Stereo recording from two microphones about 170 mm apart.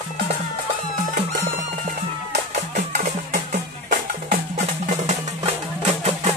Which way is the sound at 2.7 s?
50° right (ahead or behind).